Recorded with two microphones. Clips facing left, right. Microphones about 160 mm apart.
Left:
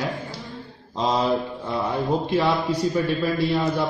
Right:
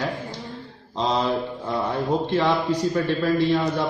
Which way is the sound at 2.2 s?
10° left (ahead or behind).